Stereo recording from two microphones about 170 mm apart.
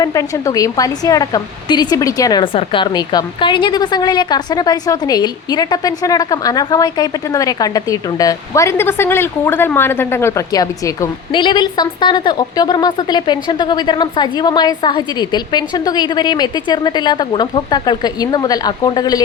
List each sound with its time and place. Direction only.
0.0 s a woman's voice: 20° left (ahead or behind)